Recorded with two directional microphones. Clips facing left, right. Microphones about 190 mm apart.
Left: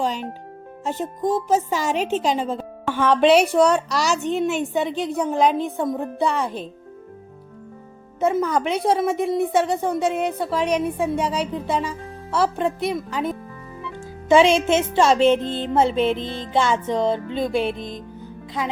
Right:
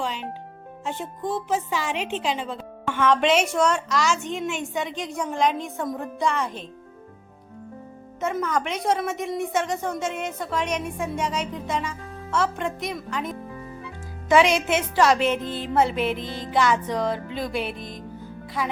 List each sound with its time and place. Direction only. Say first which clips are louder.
0.0 s a woman's voice: left 5 dB; 40° left (ahead or behind)
8.2 s a woman's voice: left 5 dB; 30° left (ahead or behind)